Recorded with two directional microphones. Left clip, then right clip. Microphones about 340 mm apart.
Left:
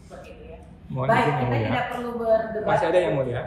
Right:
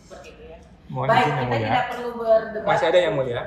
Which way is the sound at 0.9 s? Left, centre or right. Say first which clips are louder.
Right 2 dB; centre.